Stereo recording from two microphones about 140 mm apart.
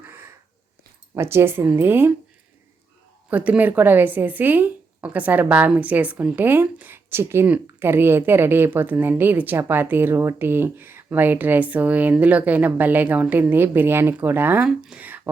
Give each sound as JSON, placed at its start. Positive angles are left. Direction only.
{"t": 0.0, "sound": "wheeze", "side_deg": -15}
{"t": 1.1, "sound": "speech", "side_deg": -20}
{"t": 3.2, "sound": "speech", "side_deg": -10}